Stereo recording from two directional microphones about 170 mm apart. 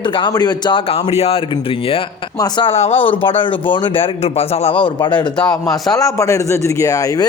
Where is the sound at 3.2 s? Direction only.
30° left (ahead or behind).